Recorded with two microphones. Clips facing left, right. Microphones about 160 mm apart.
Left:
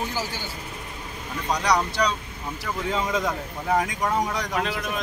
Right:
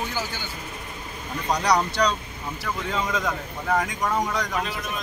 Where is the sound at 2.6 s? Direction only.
20° left (ahead or behind).